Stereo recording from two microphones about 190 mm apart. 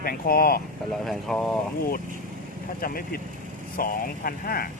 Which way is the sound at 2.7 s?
50° left (ahead or behind).